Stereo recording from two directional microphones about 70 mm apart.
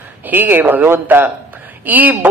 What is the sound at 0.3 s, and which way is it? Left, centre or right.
A man's voice, right.